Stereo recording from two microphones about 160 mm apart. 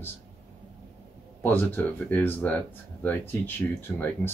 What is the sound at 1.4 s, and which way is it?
Speech, 15° left (ahead or behind).